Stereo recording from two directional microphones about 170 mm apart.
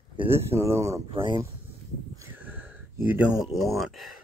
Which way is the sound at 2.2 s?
10° right (ahead or behind).